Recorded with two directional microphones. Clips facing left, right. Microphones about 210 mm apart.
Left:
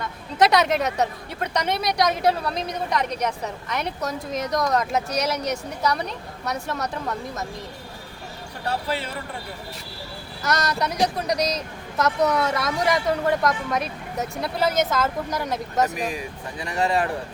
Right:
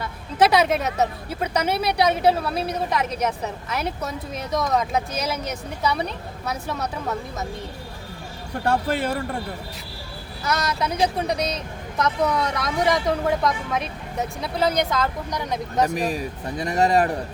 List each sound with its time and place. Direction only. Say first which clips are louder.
0.0 s speech: right 1 dB; 5° right (ahead or behind)
8.6 s a man's voice: right 5 dB; 50° right (ahead or behind)
10.4 s speech: even; centre (ahead or behind)
16.0 s speech: right 3 dB; 35° right (ahead or behind)